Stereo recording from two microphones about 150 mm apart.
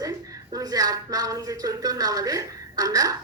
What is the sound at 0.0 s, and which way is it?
A woman's voice, 25° right (ahead or behind).